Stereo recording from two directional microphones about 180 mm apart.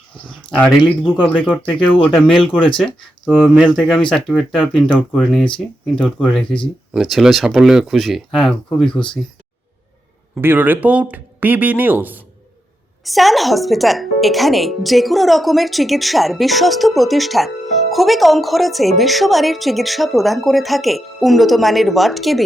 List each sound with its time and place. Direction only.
0.9 s speech: 5° left (ahead or behind)
3.8 s speech: centre (ahead or behind)
10.3 s speech: 10° right (ahead or behind)